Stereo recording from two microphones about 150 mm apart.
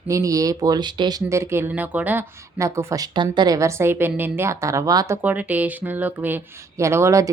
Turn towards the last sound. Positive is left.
turn(degrees=-20)  # may be behind; listen again after turning